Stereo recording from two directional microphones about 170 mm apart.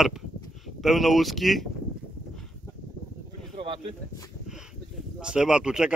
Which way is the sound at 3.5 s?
35° right (ahead or behind).